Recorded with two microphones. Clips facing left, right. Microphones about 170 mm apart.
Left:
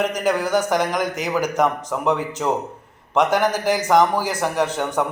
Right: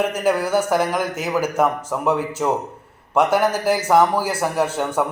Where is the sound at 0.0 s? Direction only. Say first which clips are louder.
Right 1 dB; 10° right (ahead or behind).